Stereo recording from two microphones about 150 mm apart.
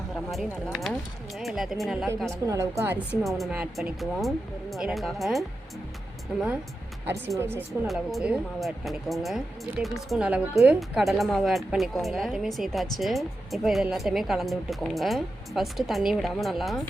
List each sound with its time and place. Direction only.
0.3 s speech: centre (ahead or behind)
2.5 s a woman's voice: 20° right (ahead or behind)
3.2 s speech: centre (ahead or behind)
7.3 s speech: 15° right (ahead or behind)
7.9 s speech: 5° right (ahead or behind)